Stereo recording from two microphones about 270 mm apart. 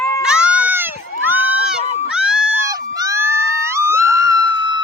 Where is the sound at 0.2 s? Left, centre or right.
Centre.